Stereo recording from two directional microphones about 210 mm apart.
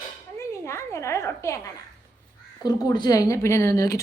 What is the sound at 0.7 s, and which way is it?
Speech, 15° left (ahead or behind).